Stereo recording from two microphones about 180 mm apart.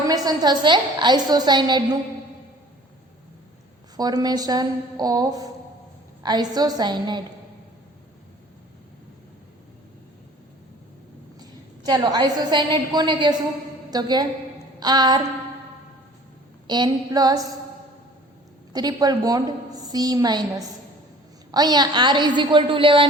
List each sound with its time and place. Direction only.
0.1 s a woman's voice: 25° right (ahead or behind)
3.9 s a woman's voice: 20° right (ahead or behind)
11.3 s a woman's voice: 20° right (ahead or behind)
16.6 s a woman's voice: 25° right (ahead or behind)
18.7 s a woman's voice: 20° right (ahead or behind)